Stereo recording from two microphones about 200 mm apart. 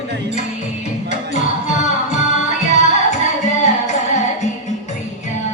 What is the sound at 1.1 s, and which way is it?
Music, 35° left (ahead or behind).